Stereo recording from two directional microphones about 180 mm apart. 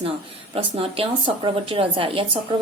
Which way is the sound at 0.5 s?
30° right (ahead or behind).